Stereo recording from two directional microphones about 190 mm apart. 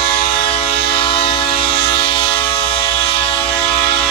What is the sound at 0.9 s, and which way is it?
Train, 30° left (ahead or behind).